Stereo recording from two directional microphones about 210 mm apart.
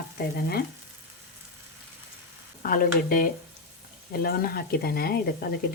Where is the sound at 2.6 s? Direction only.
45° left (ahead or behind).